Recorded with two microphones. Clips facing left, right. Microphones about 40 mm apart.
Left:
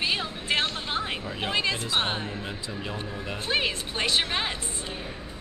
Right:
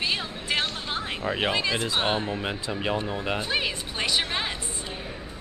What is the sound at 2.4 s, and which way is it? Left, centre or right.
Speech, right.